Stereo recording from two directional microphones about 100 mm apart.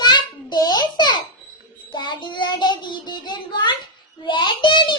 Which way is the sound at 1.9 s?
50° left (ahead or behind).